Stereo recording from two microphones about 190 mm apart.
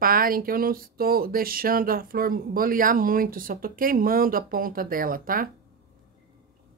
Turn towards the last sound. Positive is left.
turn(degrees=-50)  # may be behind; listen again after turning